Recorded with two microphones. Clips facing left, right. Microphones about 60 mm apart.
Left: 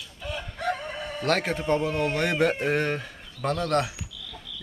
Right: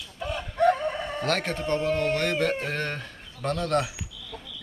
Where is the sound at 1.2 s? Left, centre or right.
Centre.